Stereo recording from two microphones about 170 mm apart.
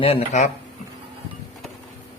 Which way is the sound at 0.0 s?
40° left (ahead or behind).